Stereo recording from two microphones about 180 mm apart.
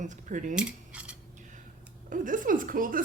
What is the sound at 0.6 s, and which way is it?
Coin, 5° right (ahead or behind).